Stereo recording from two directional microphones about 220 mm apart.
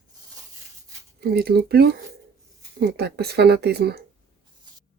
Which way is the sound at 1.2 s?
45° right (ahead or behind).